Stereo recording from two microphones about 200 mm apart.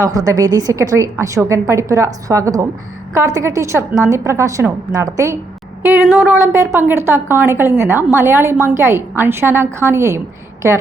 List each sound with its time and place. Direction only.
0.0 s a woman's voice: 15° right (ahead or behind)